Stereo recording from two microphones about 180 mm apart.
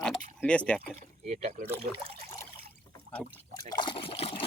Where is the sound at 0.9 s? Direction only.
40° right (ahead or behind).